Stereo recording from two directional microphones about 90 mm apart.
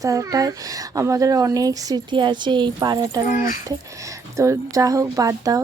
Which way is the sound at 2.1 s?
60° right (ahead or behind).